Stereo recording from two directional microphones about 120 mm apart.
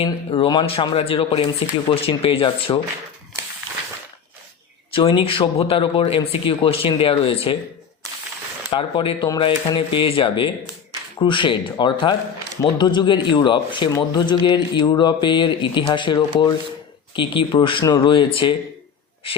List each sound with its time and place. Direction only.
0.0 s speech: 45° left (ahead or behind)
4.9 s speech: 45° left (ahead or behind)
8.7 s speech: 45° left (ahead or behind)